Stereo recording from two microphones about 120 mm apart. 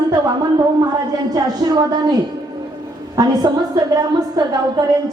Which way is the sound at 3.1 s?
30° right (ahead or behind).